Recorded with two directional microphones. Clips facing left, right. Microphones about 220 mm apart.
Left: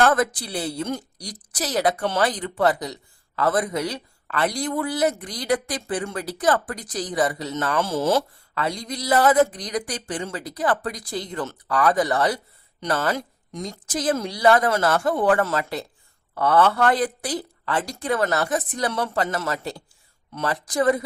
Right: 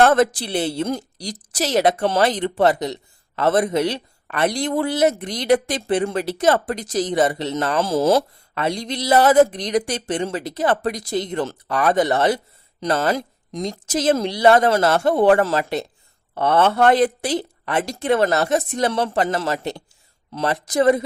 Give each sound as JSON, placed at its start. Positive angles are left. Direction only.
{"t": 0.0, "sound": "speech", "side_deg": -25}
{"t": 7.8, "sound": "speech", "side_deg": -35}
{"t": 8.5, "sound": "speech", "side_deg": -25}